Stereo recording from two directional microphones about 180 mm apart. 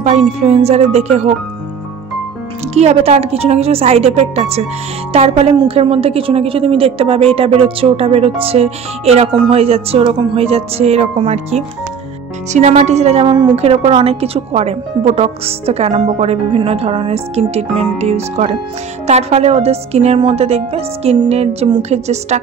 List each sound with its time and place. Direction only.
0.0 s a woman's voice: 40° right (ahead or behind)
2.7 s a woman's voice: 35° right (ahead or behind)